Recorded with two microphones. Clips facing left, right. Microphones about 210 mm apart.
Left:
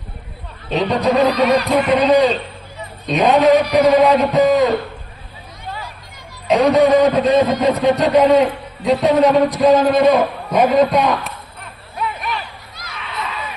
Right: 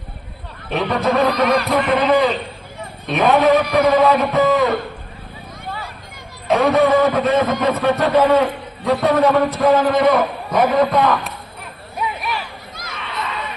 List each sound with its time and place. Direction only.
0.7 s a man's voice: 20° left (ahead or behind)
1.9 s a man's voice: 15° left (ahead or behind)
6.5 s a man's voice: 15° left (ahead or behind)
11.9 s a sound: 5° right (ahead or behind)